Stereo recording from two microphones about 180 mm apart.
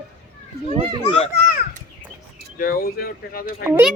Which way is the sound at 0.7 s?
25° right (ahead or behind).